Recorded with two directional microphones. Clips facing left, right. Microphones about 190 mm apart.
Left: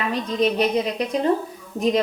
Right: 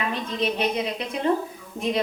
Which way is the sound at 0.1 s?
40° left (ahead or behind).